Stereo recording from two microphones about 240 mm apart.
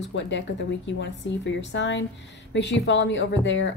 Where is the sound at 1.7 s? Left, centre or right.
Left.